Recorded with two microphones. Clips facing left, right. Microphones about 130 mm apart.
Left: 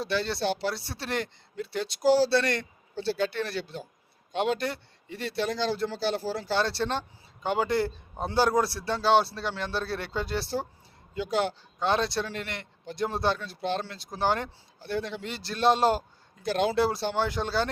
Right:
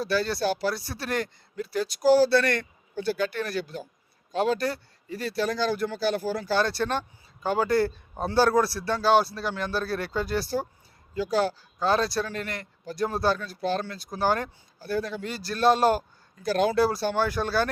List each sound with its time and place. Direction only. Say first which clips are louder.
0.0 s speech: right 3 dB; 25° left (ahead or behind)